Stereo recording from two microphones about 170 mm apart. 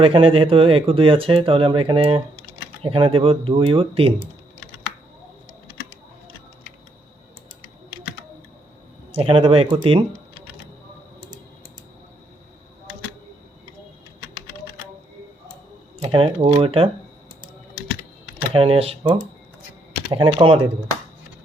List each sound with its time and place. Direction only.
0.0 s speech: 30° right (ahead or behind)
9.1 s speech: 35° right (ahead or behind)
16.0 s speech: 35° right (ahead or behind)
18.5 s speech: 35° right (ahead or behind)